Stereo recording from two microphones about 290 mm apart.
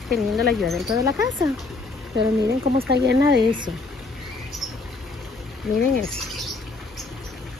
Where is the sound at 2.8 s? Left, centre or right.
Right.